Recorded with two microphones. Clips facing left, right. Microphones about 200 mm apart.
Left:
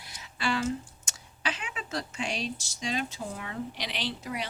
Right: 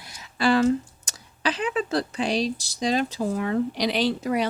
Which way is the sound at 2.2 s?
35° right (ahead or behind).